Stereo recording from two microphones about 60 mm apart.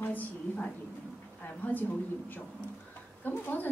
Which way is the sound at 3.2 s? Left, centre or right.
Left.